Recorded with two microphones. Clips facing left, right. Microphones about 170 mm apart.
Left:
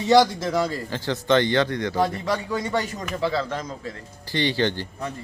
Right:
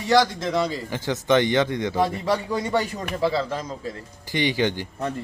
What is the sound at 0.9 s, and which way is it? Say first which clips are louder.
A man's voice: even; 15° right (ahead or behind).